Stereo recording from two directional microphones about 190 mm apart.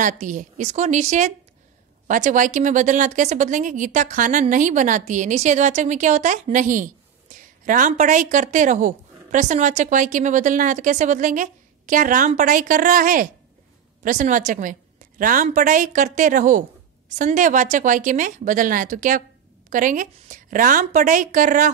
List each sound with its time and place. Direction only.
0.0 s a woman's voice: 40° right (ahead or behind)